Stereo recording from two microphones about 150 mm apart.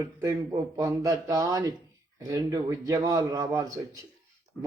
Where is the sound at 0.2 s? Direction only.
20° right (ahead or behind).